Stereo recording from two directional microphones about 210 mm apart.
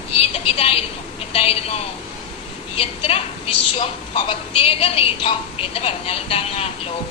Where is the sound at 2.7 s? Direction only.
25° left (ahead or behind).